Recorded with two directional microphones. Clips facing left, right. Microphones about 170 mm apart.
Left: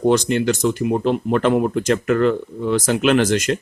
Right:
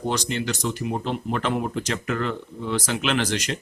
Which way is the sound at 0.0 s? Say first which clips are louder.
Left 10 dB; 55° left (ahead or behind).